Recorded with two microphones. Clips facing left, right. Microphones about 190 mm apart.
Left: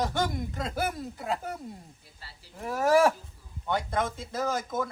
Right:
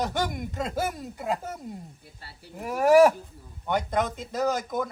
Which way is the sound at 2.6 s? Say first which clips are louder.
Right 5 dB; 15° right (ahead or behind).